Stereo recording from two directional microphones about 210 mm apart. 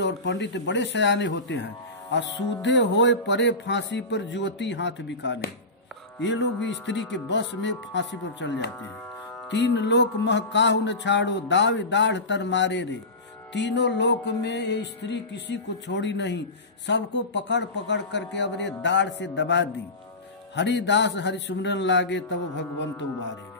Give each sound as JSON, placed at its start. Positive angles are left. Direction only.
{"t": 0.0, "sound": "music", "side_deg": 55}